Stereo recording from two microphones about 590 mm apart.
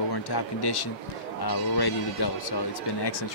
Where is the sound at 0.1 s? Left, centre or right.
Left.